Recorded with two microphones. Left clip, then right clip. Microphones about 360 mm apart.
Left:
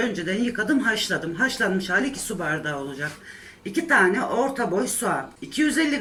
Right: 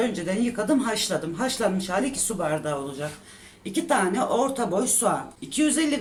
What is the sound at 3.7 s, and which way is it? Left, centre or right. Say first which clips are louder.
Speech: left 4 dB; centre.